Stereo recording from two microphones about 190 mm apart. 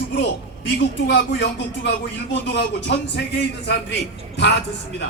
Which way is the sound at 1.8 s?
65° left (ahead or behind).